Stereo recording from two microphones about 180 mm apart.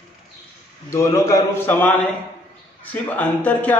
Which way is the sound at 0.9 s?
15° left (ahead or behind).